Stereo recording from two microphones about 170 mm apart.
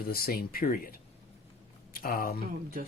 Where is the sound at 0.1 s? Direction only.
60° left (ahead or behind).